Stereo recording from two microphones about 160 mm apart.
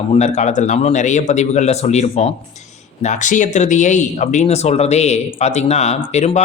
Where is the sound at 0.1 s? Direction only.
45° left (ahead or behind).